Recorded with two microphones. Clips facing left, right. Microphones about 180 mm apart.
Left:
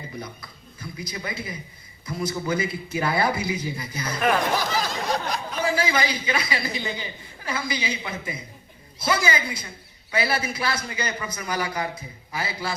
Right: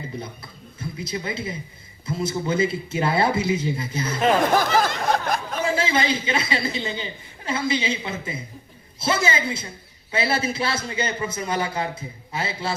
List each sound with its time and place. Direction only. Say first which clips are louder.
0.8 s a man's voice: right 4 dB; 25° right (ahead or behind)
4.5 s a sound: right 6 dB; 55° right (ahead or behind)
5.6 s a man's voice: right 1 dB; 25° right (ahead or behind)